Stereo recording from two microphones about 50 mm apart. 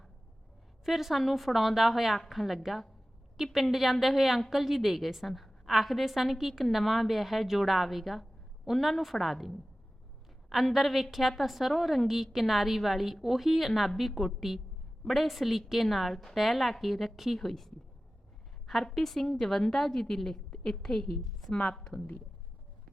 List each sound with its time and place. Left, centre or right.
0.9 s a woman's voice: centre
21.2 s a sound: centre
21.5 s a woman's voice: left